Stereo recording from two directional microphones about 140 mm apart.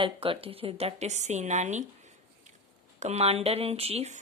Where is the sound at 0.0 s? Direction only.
40° right (ahead or behind); by 1.8 s 55° right (ahead or behind).